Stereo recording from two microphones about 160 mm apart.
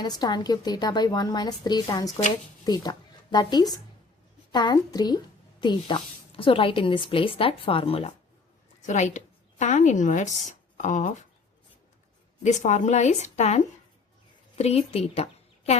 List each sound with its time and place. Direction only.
0.0 s a woman's voice: 25° left (ahead or behind)
8.9 s a woman's voice: 50° left (ahead or behind)
12.4 s a woman's voice: 50° left (ahead or behind)
14.6 s a woman's voice: 40° left (ahead or behind)